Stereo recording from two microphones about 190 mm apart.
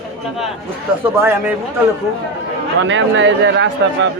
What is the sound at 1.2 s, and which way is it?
Speech, 10° right (ahead or behind).